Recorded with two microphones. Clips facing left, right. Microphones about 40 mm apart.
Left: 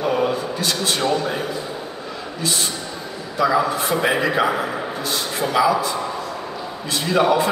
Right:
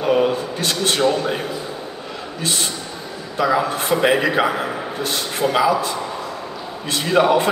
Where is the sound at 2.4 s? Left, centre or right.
Right.